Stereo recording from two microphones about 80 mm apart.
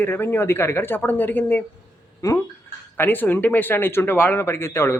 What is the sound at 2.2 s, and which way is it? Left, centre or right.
Speech, left.